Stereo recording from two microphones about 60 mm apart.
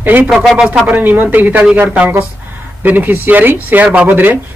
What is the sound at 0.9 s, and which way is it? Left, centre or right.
Speech, right.